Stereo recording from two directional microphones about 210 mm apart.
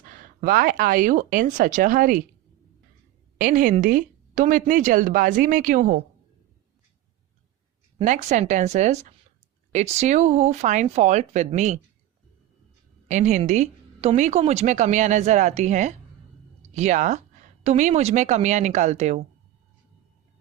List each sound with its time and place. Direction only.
0.1 s a woman's voice: 40° right (ahead or behind)
3.3 s a woman's voice: 40° right (ahead or behind)
7.9 s a woman's voice: 35° right (ahead or behind)
13.1 s a woman's voice: 35° right (ahead or behind)